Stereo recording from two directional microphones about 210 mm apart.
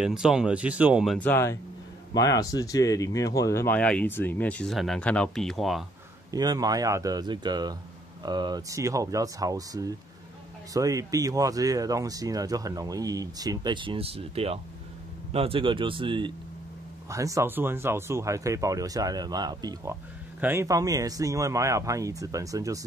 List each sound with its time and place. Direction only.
0.0 s speech: 5° right (ahead or behind)
6.3 s speech: 15° right (ahead or behind)